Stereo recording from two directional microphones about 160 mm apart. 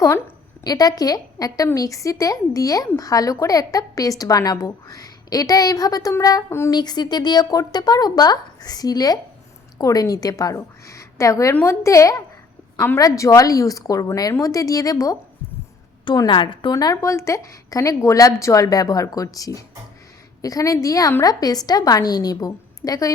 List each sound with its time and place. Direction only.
0.6 s a woman's voice: 25° left (ahead or behind)